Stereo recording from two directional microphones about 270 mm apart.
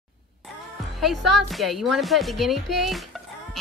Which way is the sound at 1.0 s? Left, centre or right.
Centre.